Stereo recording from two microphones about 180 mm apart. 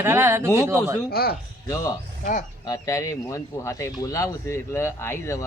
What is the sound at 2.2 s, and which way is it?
Speech, 45° left (ahead or behind).